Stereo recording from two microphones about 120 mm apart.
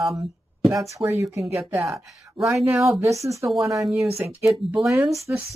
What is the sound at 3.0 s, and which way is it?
Speech, 25° right (ahead or behind).